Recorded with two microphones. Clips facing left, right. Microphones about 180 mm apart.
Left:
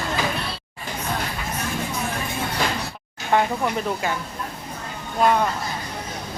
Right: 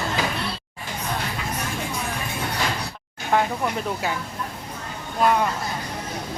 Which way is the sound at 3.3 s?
Centre (ahead or behind).